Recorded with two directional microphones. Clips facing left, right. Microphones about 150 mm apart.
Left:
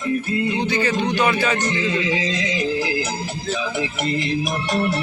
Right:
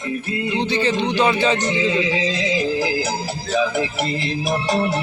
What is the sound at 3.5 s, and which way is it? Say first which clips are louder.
Music: right 5 dB; 40° right (ahead or behind).